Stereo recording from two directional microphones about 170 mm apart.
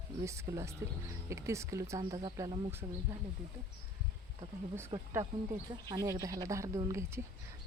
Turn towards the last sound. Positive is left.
turn(degrees=-15)  # may be behind; listen again after turning